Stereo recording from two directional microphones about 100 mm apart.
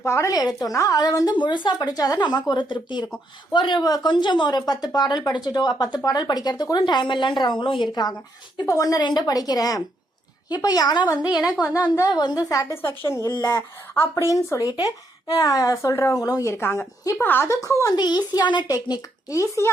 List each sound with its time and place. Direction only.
0.0 s speech: 30° left (ahead or behind)
1.4 s speech: 50° left (ahead or behind)
8.6 s speech: 35° left (ahead or behind)
11.3 s speech: 10° right (ahead or behind)
12.1 s speech: 45° left (ahead or behind); by 13.2 s 25° left (ahead or behind)
13.2 s speech: 35° left (ahead or behind)
17.2 s speech: 20° left (ahead or behind)
17.5 s speech: 35° left (ahead or behind)
17.9 s speech: 45° left (ahead or behind)
18.7 s speech: 35° left (ahead or behind)